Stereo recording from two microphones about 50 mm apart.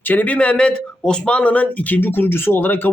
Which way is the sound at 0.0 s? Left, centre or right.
Left.